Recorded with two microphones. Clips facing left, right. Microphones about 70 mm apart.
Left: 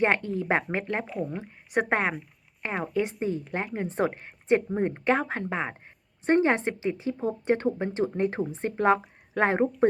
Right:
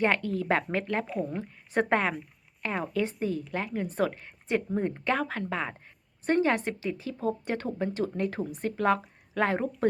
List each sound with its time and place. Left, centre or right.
0.0 s a woman's voice: left
1.0 s speech: centre
1.4 s a woman's voice: centre
3.4 s a woman's voice: left